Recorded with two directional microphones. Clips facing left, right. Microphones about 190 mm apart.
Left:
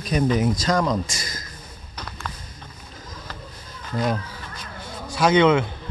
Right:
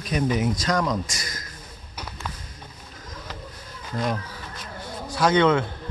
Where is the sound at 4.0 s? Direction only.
Centre (ahead or behind).